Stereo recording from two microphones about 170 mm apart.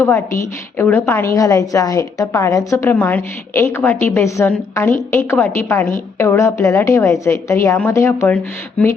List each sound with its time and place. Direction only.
0.0 s a woman's voice: 15° left (ahead or behind)